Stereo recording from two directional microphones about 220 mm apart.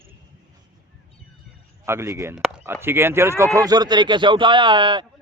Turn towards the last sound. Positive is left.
turn(degrees=-20)  # may be behind; listen again after turning